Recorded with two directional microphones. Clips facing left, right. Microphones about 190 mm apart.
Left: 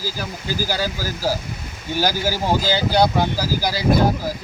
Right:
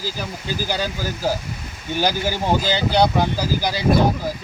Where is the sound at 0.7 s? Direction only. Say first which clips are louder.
Even; 5° left (ahead or behind).